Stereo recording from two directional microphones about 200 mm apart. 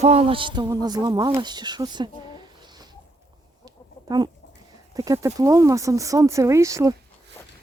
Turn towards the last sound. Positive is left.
turn(degrees=-15)  # may be behind; listen again after turning